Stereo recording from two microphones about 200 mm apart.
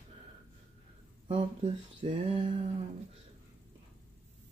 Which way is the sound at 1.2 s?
25° right (ahead or behind).